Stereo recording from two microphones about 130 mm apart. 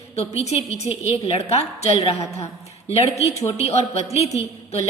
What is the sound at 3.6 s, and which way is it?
Speech, 55° left (ahead or behind).